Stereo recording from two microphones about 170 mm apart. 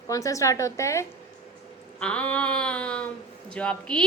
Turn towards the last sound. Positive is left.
turn(degrees=5)  # may be behind; listen again after turning